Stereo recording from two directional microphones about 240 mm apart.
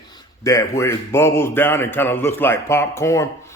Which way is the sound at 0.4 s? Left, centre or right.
Centre.